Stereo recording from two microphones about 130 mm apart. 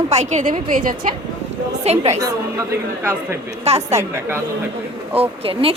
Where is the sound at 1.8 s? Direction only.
55° right (ahead or behind).